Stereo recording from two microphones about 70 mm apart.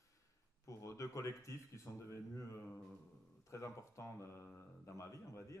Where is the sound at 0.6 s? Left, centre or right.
Left.